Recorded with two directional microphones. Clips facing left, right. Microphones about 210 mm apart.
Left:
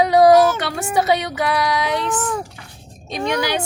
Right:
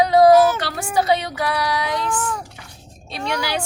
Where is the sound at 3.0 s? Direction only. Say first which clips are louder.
Left 4 dB; 15° left (ahead or behind).